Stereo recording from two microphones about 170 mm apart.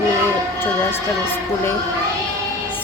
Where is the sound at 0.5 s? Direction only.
15° left (ahead or behind).